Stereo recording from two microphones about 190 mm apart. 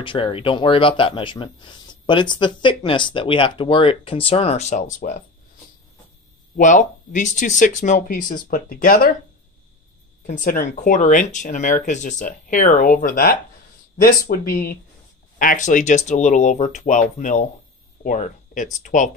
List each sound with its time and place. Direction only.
0.0 s speech: 25° left (ahead or behind); by 5.2 s 45° left (ahead or behind)
6.5 s speech: 40° left (ahead or behind)
10.2 s speech: 45° left (ahead or behind)